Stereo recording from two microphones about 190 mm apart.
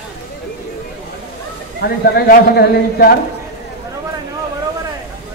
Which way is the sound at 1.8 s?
55° left (ahead or behind).